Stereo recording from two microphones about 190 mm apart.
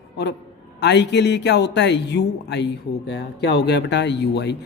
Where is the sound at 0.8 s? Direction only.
65° left (ahead or behind).